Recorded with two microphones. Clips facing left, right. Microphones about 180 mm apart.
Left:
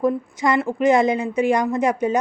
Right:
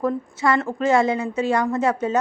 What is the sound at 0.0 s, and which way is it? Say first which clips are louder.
A woman's voice: left 2 dB; 15° left (ahead or behind).